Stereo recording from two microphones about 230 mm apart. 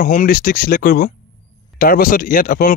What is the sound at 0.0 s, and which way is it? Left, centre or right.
Speech, left.